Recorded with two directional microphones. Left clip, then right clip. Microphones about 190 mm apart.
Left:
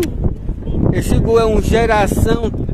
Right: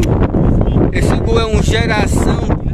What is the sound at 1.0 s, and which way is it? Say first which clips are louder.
Speech: left 5 dB; 15° left (ahead or behind).